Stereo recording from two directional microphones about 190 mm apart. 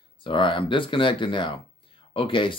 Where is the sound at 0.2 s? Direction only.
25° left (ahead or behind).